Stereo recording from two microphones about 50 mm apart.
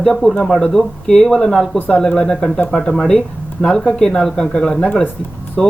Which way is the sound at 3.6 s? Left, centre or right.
Centre.